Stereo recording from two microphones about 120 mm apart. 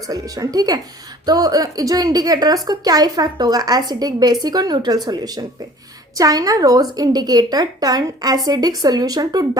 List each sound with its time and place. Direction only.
0.1 s a woman's voice: 30° right (ahead or behind)